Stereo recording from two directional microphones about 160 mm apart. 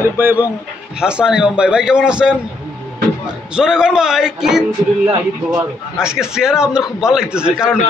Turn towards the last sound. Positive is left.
turn(degrees=-5)  # may be behind; listen again after turning